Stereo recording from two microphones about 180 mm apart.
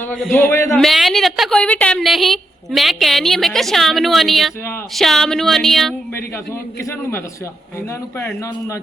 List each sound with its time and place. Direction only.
0.3 s a man's voice: 10° left (ahead or behind)
0.7 s a woman's voice: centre (ahead or behind)
8.2 s a man's voice: 15° left (ahead or behind)